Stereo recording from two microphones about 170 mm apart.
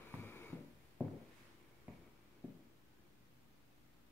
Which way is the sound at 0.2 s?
15° left (ahead or behind).